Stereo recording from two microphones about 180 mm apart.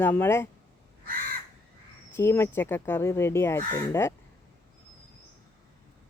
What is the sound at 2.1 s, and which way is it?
Speech, 15° left (ahead or behind).